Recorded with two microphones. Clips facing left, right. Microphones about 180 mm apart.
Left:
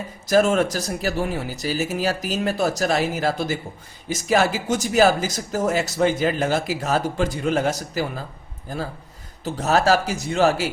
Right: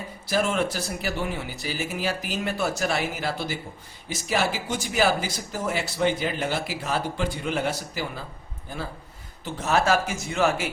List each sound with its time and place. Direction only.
0.3 s speech: 45° left (ahead or behind)
9.4 s speech: 40° left (ahead or behind)